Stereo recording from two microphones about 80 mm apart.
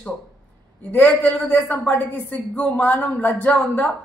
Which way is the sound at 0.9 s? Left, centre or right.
Left.